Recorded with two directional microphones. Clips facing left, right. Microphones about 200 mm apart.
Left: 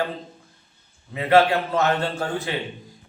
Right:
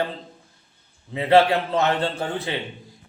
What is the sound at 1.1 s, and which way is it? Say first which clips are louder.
Speech: right 1 dB; 25° right (ahead or behind).